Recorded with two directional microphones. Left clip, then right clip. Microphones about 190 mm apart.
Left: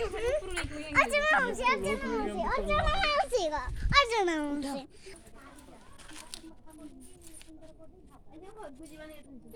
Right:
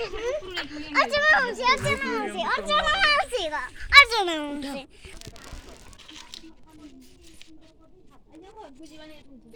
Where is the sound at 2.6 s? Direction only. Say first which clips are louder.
Right 9 dB; centre (ahead or behind); by 5.1 s 20° left (ahead or behind).